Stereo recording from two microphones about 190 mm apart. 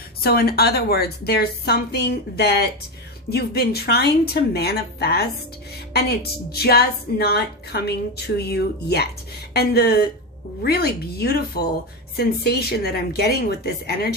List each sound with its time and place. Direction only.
0.2 s a woman's voice: 55° left (ahead or behind)